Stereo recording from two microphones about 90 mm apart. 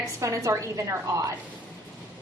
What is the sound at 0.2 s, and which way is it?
A woman's voice, 35° right (ahead or behind).